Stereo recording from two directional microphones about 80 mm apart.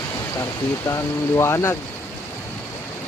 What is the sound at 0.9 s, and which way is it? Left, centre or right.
Speech, left.